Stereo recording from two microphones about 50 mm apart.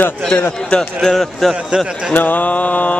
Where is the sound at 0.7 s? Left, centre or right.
Centre.